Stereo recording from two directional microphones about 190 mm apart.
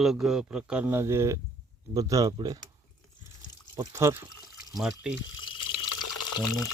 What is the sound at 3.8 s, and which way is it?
Speech, 15° right (ahead or behind).